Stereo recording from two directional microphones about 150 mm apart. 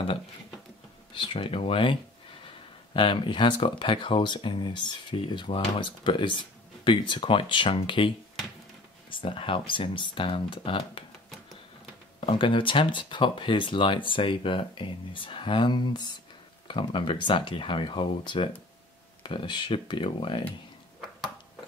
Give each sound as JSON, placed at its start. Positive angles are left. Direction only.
{"t": 1.1, "sound": "speech", "side_deg": 35}
{"t": 9.1, "sound": "speech", "side_deg": 35}
{"t": 12.2, "sound": "speech", "side_deg": 35}